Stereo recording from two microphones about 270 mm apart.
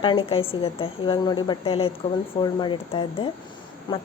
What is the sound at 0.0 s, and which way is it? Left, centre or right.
A woman's voice, centre.